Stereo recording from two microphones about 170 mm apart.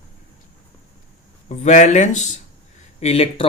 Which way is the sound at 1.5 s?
45° left (ahead or behind).